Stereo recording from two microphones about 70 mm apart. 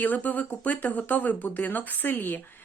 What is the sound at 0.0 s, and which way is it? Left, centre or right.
Speech, left.